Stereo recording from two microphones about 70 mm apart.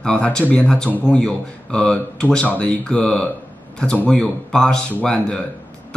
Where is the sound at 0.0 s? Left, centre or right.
Centre.